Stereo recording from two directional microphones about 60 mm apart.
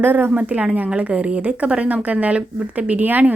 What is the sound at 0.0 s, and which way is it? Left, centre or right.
Speech, right.